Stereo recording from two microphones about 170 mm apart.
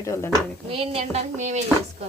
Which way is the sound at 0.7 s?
30° right (ahead or behind).